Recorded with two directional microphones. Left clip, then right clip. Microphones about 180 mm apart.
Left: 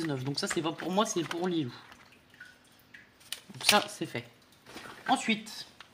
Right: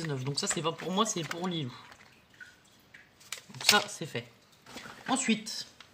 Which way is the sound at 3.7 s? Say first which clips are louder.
Even; 35° left (ahead or behind).